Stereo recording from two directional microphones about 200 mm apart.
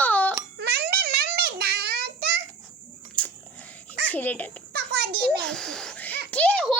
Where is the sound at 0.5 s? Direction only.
55° right (ahead or behind).